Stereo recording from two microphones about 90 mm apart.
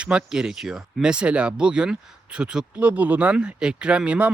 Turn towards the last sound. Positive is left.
turn(degrees=-15)  # may be behind; listen again after turning